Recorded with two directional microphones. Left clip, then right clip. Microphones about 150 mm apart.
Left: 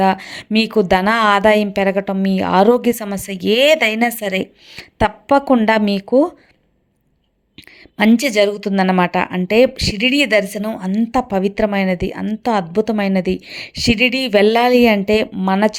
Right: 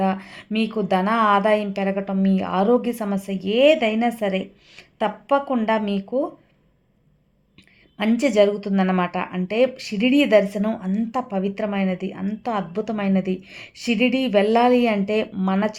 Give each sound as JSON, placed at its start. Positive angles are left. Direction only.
{"t": 0.0, "sound": "a woman's voice", "side_deg": 40}
{"t": 7.9, "sound": "a woman's voice", "side_deg": 40}